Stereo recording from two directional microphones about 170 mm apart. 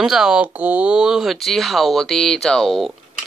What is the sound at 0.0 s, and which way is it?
Speech, 5° right (ahead or behind).